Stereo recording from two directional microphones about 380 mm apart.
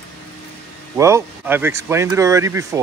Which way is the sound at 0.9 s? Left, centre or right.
Centre.